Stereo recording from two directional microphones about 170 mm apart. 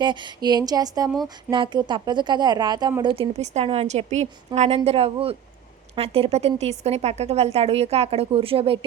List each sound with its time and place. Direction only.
0.0 s a woman's voice: 25° right (ahead or behind)